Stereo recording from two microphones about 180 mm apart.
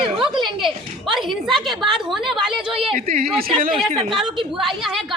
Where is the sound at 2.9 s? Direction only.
55° right (ahead or behind).